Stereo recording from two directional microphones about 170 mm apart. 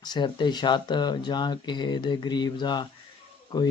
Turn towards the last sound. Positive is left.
turn(degrees=25)  # may be behind; listen again after turning